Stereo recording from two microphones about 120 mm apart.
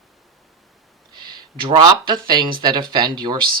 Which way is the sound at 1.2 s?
40° right (ahead or behind).